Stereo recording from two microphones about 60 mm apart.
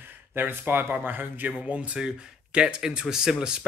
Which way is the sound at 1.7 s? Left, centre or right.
Centre.